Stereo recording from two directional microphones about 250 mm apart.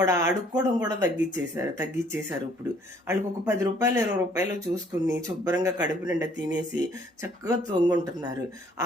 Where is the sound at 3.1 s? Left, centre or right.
Centre.